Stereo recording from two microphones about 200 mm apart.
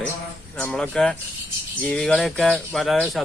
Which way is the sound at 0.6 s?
5° left (ahead or behind).